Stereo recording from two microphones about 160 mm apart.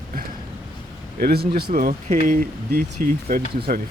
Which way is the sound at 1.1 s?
80° right.